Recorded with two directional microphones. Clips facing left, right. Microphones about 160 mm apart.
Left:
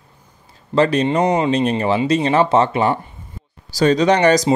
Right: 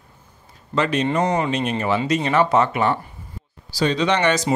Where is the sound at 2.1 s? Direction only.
30° left (ahead or behind).